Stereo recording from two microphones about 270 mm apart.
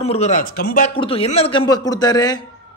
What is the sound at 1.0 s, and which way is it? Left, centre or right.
A man's voice, left.